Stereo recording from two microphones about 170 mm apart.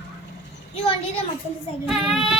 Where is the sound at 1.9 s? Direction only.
Centre (ahead or behind).